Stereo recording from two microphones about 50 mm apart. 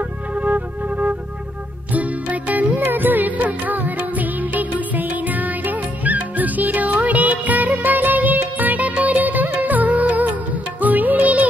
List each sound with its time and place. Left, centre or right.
0.4 s music: right
2.9 s music of bollywood: right
10.8 s music: right